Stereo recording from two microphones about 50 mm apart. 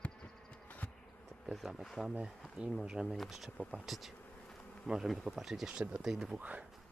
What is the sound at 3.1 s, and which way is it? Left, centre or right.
Speech, centre.